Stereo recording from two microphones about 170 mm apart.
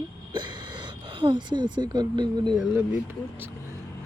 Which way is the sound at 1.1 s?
25° right (ahead or behind).